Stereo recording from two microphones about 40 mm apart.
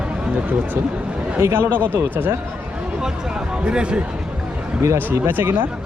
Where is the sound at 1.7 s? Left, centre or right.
Right.